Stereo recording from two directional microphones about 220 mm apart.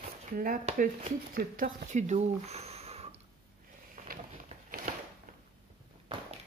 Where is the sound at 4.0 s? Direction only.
35° right (ahead or behind).